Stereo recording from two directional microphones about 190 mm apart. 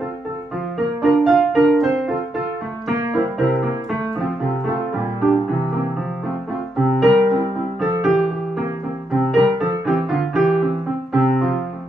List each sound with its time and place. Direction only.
1.0 s music: centre (ahead or behind)
3.0 s music: 20° right (ahead or behind)
3.3 s music: centre (ahead or behind)
6.8 s music: centre (ahead or behind)